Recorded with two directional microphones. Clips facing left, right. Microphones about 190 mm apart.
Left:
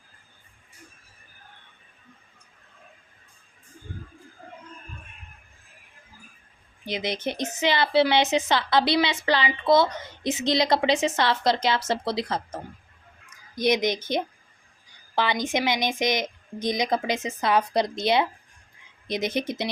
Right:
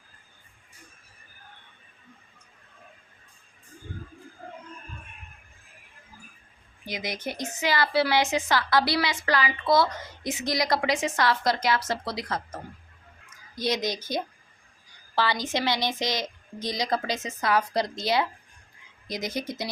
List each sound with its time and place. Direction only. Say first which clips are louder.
6.8 s a woman's voice: left 4 dB; 25° left (ahead or behind)
13.6 s a woman's voice: left 5 dB; 20° left (ahead or behind)